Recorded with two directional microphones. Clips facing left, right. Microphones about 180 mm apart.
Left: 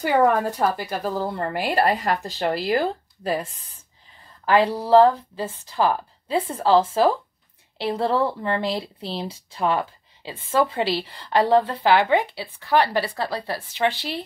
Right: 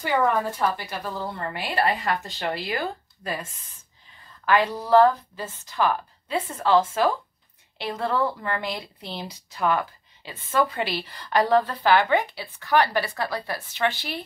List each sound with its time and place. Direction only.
0.0 s speech: 40° left (ahead or behind)